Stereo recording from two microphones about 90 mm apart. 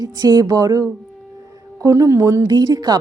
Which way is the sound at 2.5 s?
45° right (ahead or behind).